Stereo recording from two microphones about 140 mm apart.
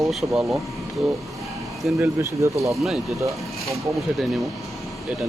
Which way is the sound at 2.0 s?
20° right (ahead or behind).